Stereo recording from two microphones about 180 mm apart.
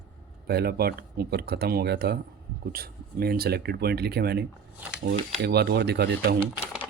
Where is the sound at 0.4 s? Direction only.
60° right (ahead or behind).